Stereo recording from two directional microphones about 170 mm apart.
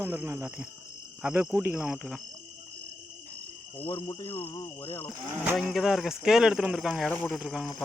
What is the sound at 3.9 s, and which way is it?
Speech, 25° left (ahead or behind).